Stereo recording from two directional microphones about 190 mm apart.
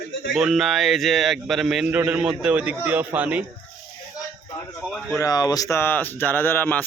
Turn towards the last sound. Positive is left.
turn(degrees=10)  # may be behind; listen again after turning